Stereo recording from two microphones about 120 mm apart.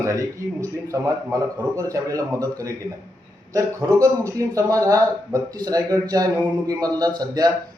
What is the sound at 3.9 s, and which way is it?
A man's voice, 25° right (ahead or behind).